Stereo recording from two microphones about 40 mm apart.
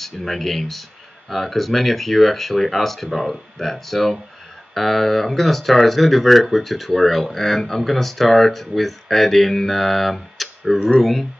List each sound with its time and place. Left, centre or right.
0.0 s speech: centre